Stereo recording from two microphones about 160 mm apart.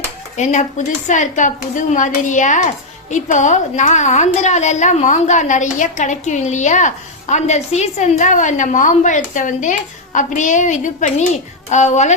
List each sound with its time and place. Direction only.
0.3 s speech: 50° left (ahead or behind)